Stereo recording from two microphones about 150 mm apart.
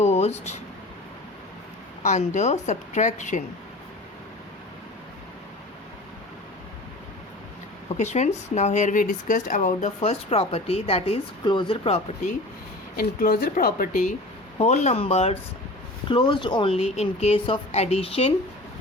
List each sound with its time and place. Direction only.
0.0 s a sound: 45° left (ahead or behind)
2.0 s speech: 50° left (ahead or behind)
7.9 s speech: 50° left (ahead or behind)
13.0 s speech: 80° left
14.6 s speech: 50° left (ahead or behind)
16.0 s a woman's voice: 35° left (ahead or behind)